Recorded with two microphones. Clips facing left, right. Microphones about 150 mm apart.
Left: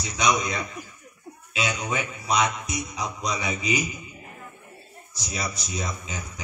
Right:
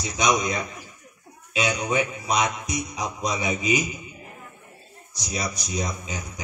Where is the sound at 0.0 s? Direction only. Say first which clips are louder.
Right 1 dB; 20° right (ahead or behind).